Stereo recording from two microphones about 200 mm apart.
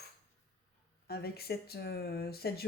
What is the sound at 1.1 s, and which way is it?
Speech, 50° left (ahead or behind).